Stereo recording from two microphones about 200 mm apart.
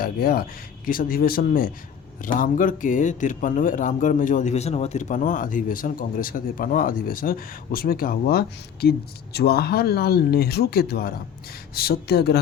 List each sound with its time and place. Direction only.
0.0 s speech: 50° left (ahead or behind)